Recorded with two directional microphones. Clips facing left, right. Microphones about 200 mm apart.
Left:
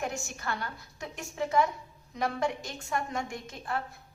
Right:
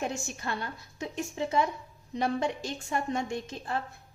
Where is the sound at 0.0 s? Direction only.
25° right (ahead or behind).